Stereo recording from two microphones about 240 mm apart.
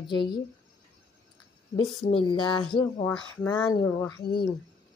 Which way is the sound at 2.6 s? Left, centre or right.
Centre.